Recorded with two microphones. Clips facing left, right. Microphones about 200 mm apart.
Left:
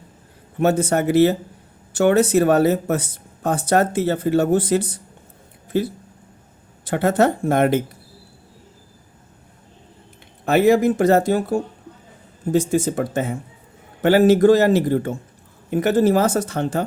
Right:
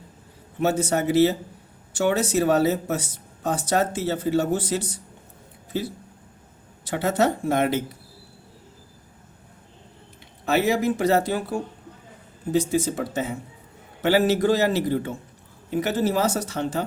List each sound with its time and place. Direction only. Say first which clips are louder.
0.6 s speech: left 4 dB; 55° left (ahead or behind)
10.4 s speech: left 6 dB; 50° left (ahead or behind)